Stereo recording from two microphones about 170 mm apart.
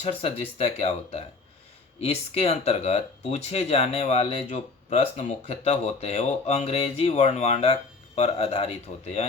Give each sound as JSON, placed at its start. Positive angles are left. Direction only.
{"t": 0.0, "sound": "speech", "side_deg": 35}